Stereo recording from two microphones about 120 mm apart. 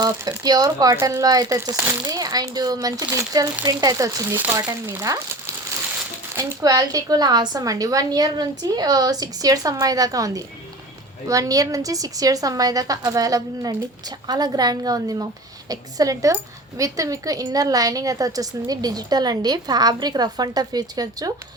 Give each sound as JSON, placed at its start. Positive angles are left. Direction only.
{"t": 0.0, "sound": "a woman's voice", "side_deg": -30}
{"t": 2.0, "sound": "a woman's voice", "side_deg": -30}
{"t": 6.3, "sound": "a woman's voice", "side_deg": -25}